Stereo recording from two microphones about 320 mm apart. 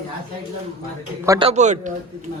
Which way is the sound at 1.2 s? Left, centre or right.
Centre.